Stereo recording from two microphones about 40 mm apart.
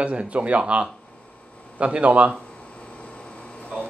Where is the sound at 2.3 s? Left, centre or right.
Left.